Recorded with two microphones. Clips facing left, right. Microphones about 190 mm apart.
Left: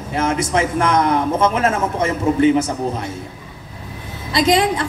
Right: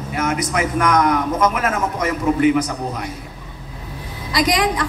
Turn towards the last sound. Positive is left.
turn(degrees=25)  # may be behind; listen again after turning